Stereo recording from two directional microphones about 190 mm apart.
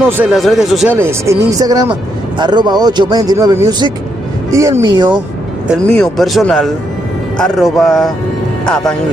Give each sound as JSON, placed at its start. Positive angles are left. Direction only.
{"t": 0.2, "sound": "speech", "side_deg": 0}
{"t": 0.9, "sound": "speech", "side_deg": -15}
{"t": 5.9, "sound": "speech", "side_deg": 0}